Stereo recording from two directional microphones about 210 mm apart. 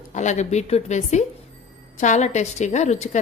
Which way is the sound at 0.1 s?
35° left (ahead or behind).